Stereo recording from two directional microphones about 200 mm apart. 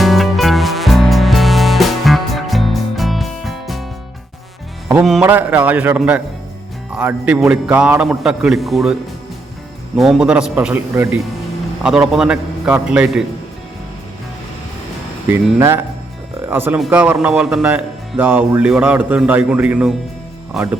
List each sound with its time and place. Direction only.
0.0 s music: centre (ahead or behind)
4.9 s a man's voice: centre (ahead or behind)
10.0 s a man's voice: 5° right (ahead or behind)
15.5 s speech: 15° right (ahead or behind)